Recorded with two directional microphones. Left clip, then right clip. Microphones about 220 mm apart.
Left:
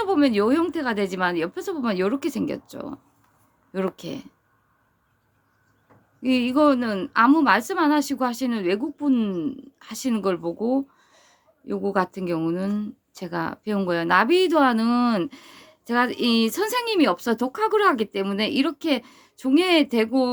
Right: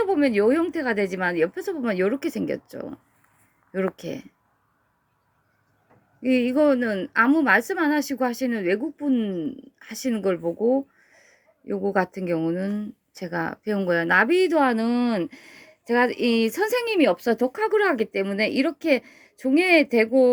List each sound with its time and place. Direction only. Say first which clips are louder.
0.0 s a woman's voice: even; centre (ahead or behind)
6.2 s a woman's voice: even; 5° right (ahead or behind)
16.1 s a woman's voice: even; 35° left (ahead or behind)
16.4 s a woman's voice: right 1 dB; 5° right (ahead or behind)